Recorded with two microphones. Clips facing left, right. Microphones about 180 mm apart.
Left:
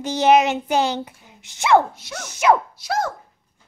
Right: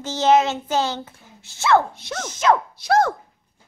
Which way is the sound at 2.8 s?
55° right (ahead or behind).